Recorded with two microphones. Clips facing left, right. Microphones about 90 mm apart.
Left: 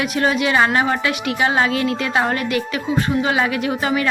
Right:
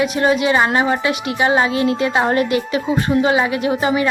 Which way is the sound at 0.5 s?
15° right (ahead or behind).